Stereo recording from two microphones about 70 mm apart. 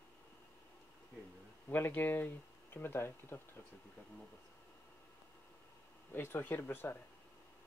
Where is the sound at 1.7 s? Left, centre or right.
Left.